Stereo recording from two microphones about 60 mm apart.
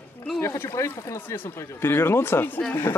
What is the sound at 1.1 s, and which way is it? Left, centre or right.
Speech, left.